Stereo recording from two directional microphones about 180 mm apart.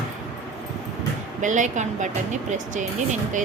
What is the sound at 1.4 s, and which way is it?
Speech, 45° right (ahead or behind).